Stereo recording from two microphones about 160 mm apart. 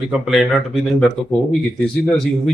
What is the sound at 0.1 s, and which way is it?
A man's voice, centre (ahead or behind).